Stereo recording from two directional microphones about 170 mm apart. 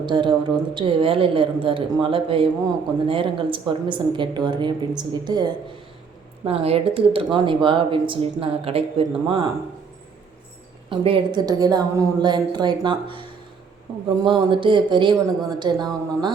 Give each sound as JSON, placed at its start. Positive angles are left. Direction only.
{"t": 0.0, "sound": "a woman's voice", "side_deg": -30}
{"t": 6.4, "sound": "speech", "side_deg": -35}
{"t": 10.8, "sound": "a woman's voice", "side_deg": -30}
{"t": 14.3, "sound": "a woman's voice", "side_deg": -30}